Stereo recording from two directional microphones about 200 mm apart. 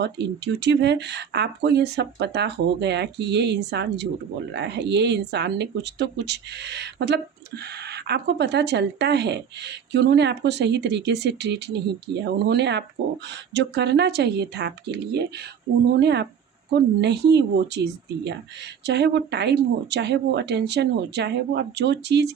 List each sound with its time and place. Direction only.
0.0 s speech: 60° right (ahead or behind)